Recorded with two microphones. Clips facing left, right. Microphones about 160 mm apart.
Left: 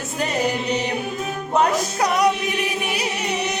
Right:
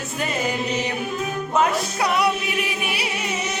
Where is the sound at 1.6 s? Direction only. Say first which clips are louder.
Left 2 dB; 40° left (ahead or behind).